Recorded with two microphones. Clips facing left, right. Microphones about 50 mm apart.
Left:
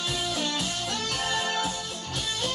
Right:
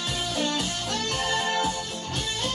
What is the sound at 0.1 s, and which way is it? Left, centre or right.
Music, right.